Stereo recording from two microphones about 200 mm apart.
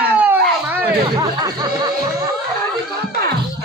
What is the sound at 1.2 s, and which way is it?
Music, 20° right (ahead or behind).